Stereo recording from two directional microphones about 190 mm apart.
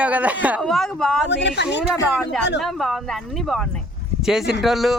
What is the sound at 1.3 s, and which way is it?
Speech, 65° left (ahead or behind).